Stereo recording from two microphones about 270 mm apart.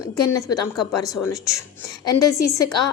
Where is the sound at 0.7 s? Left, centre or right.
Centre.